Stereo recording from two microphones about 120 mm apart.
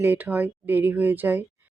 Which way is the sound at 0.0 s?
15° right (ahead or behind).